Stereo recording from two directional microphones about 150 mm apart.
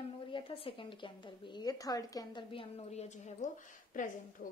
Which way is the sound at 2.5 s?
40° left (ahead or behind).